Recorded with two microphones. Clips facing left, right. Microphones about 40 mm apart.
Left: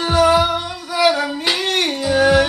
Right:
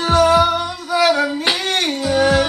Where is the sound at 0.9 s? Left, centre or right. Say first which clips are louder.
Right 1 dB; centre.